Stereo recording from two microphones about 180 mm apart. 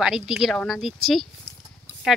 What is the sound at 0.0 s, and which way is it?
Speech, 5° right (ahead or behind).